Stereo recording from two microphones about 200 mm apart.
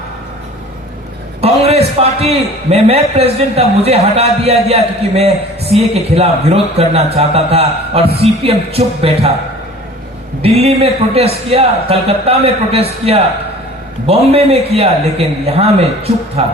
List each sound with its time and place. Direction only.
1.4 s a man's voice: 30° right (ahead or behind)
10.4 s a man's voice: 30° right (ahead or behind)